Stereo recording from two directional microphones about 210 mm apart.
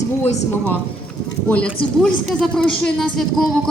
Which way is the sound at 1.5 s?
5° left (ahead or behind).